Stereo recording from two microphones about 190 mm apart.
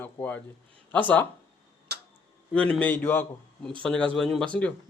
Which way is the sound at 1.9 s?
60° right (ahead or behind).